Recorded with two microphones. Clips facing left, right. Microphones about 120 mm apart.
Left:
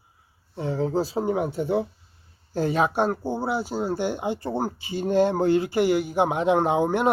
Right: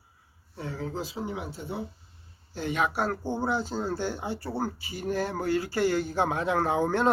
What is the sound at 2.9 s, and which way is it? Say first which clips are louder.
Speech: left 5 dB; 20° left (ahead or behind).